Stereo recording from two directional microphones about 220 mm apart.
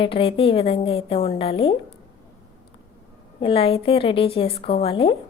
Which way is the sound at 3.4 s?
25° left (ahead or behind).